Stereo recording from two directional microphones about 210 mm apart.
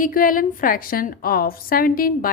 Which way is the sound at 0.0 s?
40° left (ahead or behind).